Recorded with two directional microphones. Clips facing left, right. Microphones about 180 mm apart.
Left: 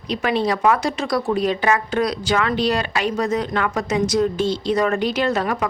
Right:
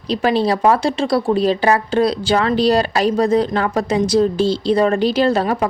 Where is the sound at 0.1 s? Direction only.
35° right (ahead or behind).